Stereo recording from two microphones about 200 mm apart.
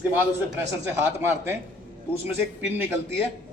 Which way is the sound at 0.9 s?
10° right (ahead or behind).